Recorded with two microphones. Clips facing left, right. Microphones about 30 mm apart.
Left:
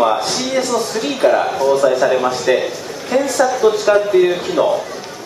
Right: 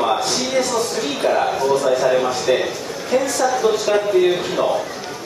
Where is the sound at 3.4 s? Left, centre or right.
Centre.